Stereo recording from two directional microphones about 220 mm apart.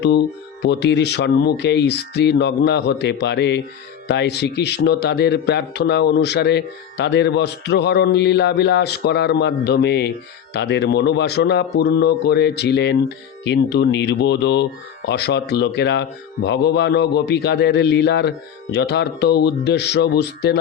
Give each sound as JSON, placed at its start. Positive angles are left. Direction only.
{"t": 0.0, "sound": "speech", "side_deg": 50}